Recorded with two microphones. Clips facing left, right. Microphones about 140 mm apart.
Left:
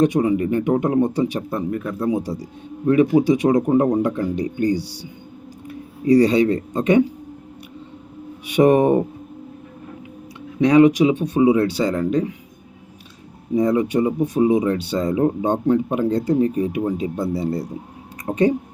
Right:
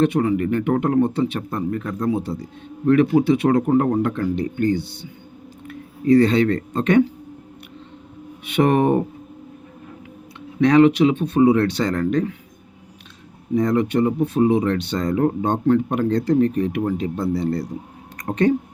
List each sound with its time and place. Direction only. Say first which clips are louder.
0.0 s a man's voice: left 1 dB; 15° left (ahead or behind)
8.6 s a man's voice: left 3 dB; 15° left (ahead or behind)
10.6 s a man's voice: left 1 dB; 10° left (ahead or behind)
13.6 s a man's voice: left 1 dB; 10° left (ahead or behind)